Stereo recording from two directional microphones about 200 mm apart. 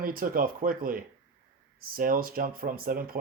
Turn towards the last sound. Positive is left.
turn(degrees=-45)  # may be behind; listen again after turning